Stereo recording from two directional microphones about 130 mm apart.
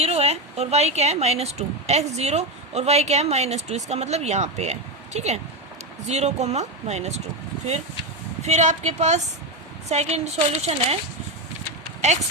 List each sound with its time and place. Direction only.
0.0 s speech: 50° right (ahead or behind)
8.4 s speech: 60° right (ahead or behind)